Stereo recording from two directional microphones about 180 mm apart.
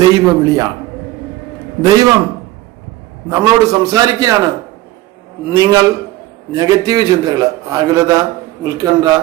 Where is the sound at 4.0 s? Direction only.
20° right (ahead or behind).